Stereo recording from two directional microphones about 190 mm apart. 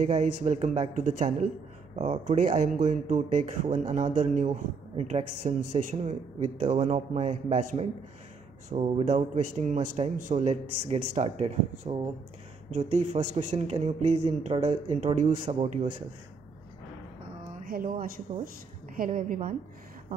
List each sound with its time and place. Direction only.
0.0 s speech: 40° right (ahead or behind)
17.6 s speech: 50° right (ahead or behind)